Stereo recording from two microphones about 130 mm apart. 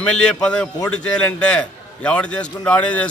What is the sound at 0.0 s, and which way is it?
A man's voice, 5° left (ahead or behind).